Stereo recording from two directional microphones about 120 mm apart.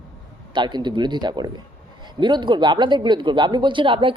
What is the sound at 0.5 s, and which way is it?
Speech, 40° right (ahead or behind).